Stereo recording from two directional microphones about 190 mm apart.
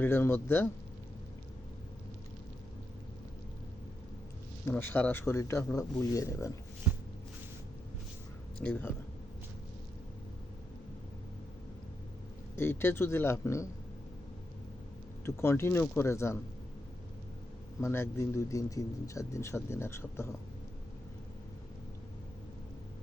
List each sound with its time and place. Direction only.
0.0 s speech: 10° left (ahead or behind)
4.6 s speech: 10° left (ahead or behind)
8.6 s speech: 10° left (ahead or behind)
12.5 s speech: 10° left (ahead or behind)
15.2 s speech: 15° left (ahead or behind)
17.8 s speech: 10° left (ahead or behind)